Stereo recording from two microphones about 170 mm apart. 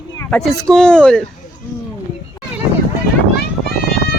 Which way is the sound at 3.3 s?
65° left (ahead or behind).